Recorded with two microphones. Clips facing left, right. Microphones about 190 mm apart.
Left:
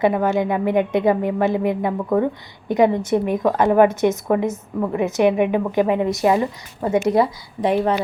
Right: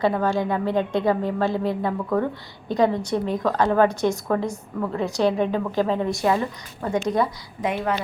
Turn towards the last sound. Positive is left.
turn(degrees=30)  # may be behind; listen again after turning